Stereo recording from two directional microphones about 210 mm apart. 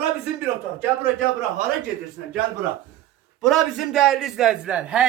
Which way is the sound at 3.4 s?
Centre (ahead or behind).